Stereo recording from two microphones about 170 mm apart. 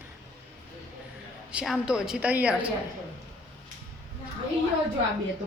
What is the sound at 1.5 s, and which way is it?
A woman's voice, 5° right (ahead or behind).